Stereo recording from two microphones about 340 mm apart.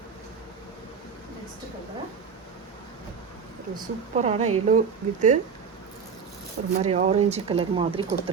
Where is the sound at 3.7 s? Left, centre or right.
Centre.